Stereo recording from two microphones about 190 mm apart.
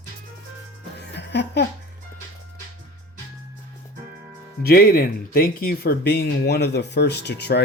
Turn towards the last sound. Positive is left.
turn(degrees=60)  # may be behind; listen again after turning